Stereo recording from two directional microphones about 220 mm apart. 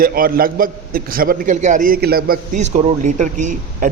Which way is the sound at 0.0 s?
40° right (ahead or behind).